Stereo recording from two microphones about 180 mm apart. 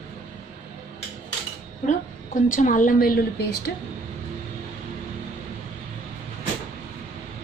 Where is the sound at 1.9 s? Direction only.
45° left (ahead or behind).